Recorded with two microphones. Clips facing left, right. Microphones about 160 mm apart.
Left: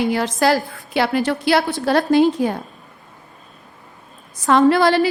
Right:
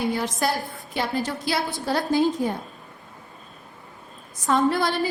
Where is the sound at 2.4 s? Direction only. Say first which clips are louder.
Left 5 dB; 90° left.